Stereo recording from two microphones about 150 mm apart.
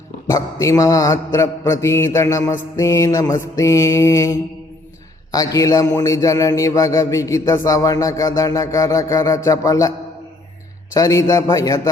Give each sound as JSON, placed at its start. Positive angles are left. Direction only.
{"t": 0.3, "sound": "mantra", "side_deg": 20}
{"t": 10.9, "sound": "mantra", "side_deg": 20}